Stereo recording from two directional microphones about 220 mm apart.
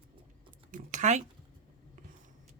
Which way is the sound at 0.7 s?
35° right (ahead or behind).